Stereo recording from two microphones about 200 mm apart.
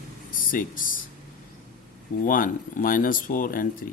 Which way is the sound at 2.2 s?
45° left (ahead or behind).